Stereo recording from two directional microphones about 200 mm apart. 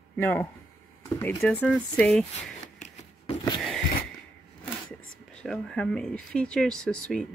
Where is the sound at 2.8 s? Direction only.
25° left (ahead or behind).